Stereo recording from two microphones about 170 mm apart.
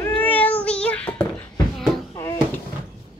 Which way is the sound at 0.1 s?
10° left (ahead or behind).